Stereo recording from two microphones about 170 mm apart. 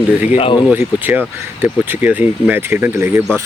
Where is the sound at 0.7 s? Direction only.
10° right (ahead or behind).